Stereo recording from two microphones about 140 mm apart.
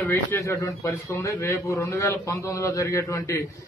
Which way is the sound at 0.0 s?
15° left (ahead or behind).